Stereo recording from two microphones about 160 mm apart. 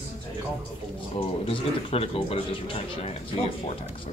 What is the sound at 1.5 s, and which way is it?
Speech, 35° left (ahead or behind).